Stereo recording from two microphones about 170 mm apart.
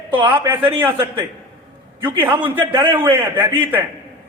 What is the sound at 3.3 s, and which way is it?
Speech, 10° right (ahead or behind).